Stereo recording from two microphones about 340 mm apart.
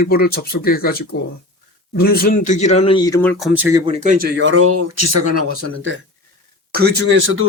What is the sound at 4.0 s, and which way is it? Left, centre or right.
Speech, right.